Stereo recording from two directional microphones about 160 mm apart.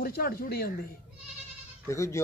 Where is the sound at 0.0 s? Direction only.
65° left (ahead or behind).